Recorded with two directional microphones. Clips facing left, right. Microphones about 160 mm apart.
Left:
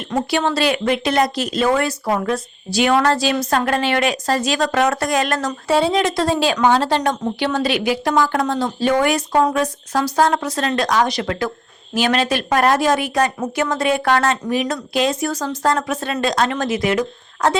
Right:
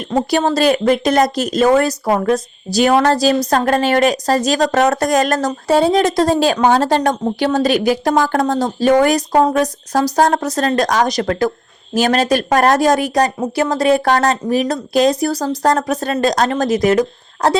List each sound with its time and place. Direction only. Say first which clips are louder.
0.3 s speech: right 5 dB; 40° right (ahead or behind)